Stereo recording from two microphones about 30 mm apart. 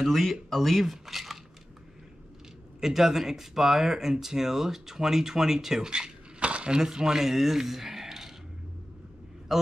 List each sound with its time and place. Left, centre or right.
0.0 s speech: centre
1.0 s a sound: centre
2.8 s speech: centre
5.9 s a sound: right
6.8 s speech: right
7.2 s speech: centre
9.5 s a man's voice: centre